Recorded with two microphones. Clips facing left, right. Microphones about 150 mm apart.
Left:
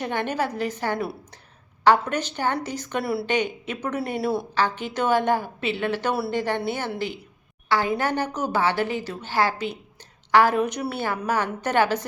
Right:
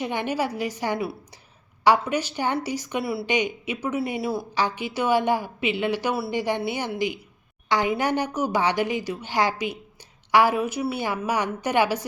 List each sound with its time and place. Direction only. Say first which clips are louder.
0.0 s a woman's voice: even; 10° right (ahead or behind)
3.2 s a woman's voice: even; 10° right (ahead or behind)
3.9 s speech: right 1 dB; 55° left (ahead or behind)
4.2 s speech: left 2 dB; centre (ahead or behind)
4.5 s a woman's voice: left 1 dB; 10° right (ahead or behind)